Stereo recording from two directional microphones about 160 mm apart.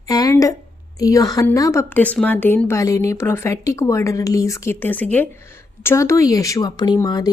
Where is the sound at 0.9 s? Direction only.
20° left (ahead or behind).